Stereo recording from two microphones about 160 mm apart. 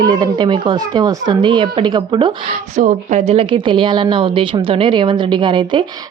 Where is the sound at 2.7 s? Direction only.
50° right (ahead or behind).